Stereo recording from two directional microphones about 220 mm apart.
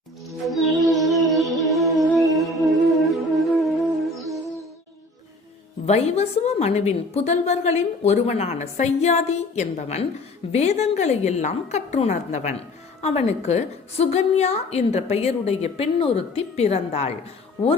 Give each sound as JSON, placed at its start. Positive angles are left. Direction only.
{"t": 0.4, "sound": "music", "side_deg": 0}
{"t": 5.8, "sound": "a woman's voice", "side_deg": 30}